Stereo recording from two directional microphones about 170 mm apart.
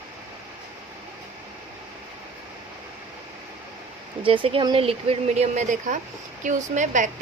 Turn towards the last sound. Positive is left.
turn(degrees=-45)  # may be behind; listen again after turning